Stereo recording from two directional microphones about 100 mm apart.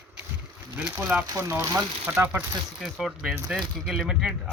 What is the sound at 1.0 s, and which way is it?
Speech, 20° right (ahead or behind).